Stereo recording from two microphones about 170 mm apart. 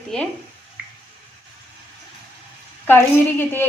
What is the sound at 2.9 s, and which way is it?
Speech, 15° left (ahead or behind).